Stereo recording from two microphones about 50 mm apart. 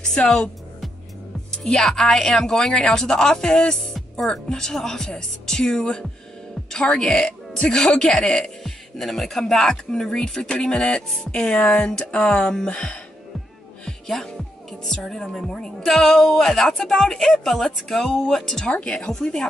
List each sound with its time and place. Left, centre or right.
0.0 s speech: centre
1.8 s speech: centre
11.1 s a sound: centre
12.4 s speech: centre
13.8 s music: centre
15.0 s speech: centre